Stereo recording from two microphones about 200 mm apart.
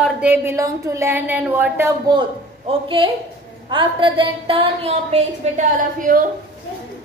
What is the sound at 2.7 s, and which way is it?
A woman's voice, 25° right (ahead or behind).